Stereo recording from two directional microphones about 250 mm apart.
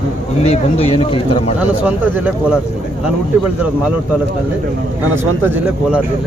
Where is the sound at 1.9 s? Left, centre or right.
Centre.